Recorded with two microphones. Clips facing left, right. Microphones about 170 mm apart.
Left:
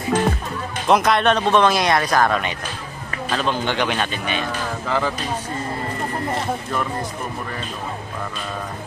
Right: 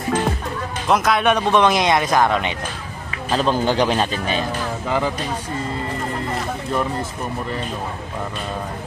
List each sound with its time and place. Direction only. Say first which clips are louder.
0.8 s speech: left 1 dB; centre (ahead or behind); by 2.5 s 20° right (ahead or behind)
3.3 s speech: right 4 dB; 35° right (ahead or behind)
4.8 s speech: right 1 dB; 15° right (ahead or behind)